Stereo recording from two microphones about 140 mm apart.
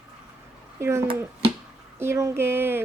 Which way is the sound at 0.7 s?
20° right (ahead or behind).